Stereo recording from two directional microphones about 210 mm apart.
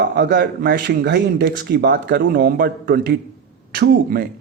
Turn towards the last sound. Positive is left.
turn(degrees=-50)  # may be behind; listen again after turning